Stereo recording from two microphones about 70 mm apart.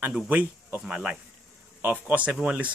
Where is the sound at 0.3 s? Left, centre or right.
Right.